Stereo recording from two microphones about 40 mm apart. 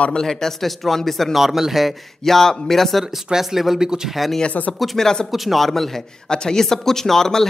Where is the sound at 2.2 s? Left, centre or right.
Centre.